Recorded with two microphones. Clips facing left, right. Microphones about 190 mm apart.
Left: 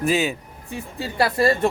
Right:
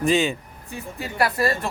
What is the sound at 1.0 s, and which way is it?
Speech, 30° left (ahead or behind).